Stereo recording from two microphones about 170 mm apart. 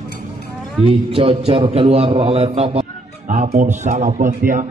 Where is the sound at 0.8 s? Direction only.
35° right (ahead or behind).